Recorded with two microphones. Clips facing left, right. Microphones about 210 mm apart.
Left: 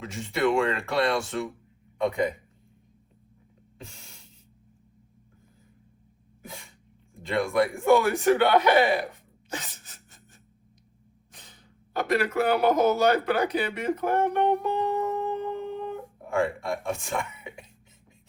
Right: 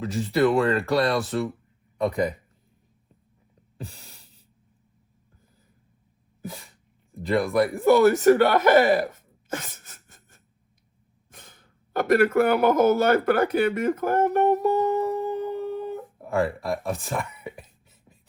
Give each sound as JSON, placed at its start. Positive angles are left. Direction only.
{"t": 0.0, "sound": "speech", "side_deg": -35}
{"t": 1.0, "sound": "speech", "side_deg": 0}
{"t": 3.8, "sound": "a sound", "side_deg": -35}
{"t": 7.3, "sound": "speech", "side_deg": 0}
{"t": 8.0, "sound": "speech", "side_deg": -45}
{"t": 11.3, "sound": "speech", "side_deg": -50}
{"t": 14.5, "sound": "music", "side_deg": -45}
{"t": 14.8, "sound": "humming", "side_deg": 0}
{"t": 16.4, "sound": "speech", "side_deg": 0}